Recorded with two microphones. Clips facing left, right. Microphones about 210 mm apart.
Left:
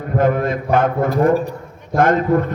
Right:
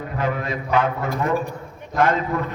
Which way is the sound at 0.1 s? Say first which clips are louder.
Left 9 dB; 50° left (ahead or behind).